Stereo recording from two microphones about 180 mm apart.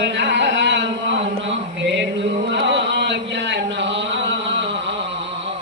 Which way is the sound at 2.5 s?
75° right (ahead or behind).